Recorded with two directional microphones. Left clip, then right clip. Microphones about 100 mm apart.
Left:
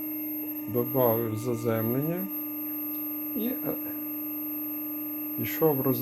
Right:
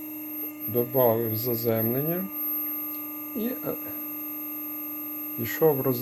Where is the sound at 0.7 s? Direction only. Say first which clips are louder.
Right 3 dB; 20° right (ahead or behind).